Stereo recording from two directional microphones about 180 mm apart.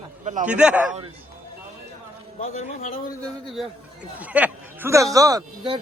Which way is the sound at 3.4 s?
Centre (ahead or behind).